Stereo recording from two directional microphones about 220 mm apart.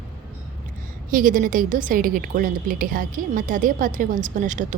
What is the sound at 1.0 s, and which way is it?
A woman's voice, 40° right (ahead or behind).